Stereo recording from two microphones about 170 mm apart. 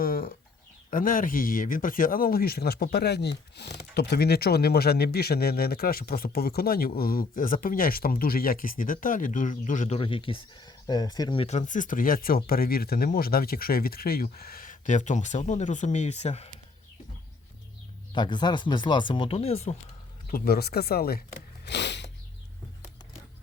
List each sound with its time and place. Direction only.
0.0 s a sound: 60° left (ahead or behind)
0.9 s speech: 55° left (ahead or behind)
10.0 s speech: 30° left (ahead or behind)
11.4 s speech: 45° left (ahead or behind)
18.1 s speech: 25° left (ahead or behind)
20.3 s speech: 65° left (ahead or behind)
21.6 s a sound: 90° left